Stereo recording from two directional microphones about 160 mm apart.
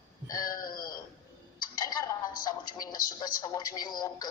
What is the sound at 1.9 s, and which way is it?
Music, 25° left (ahead or behind).